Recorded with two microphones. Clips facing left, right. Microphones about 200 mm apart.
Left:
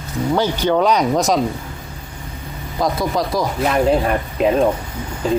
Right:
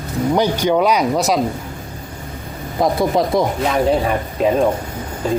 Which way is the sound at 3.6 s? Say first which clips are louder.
Even; centre (ahead or behind).